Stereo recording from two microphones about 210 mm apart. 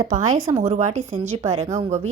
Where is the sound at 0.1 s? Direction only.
35° right (ahead or behind).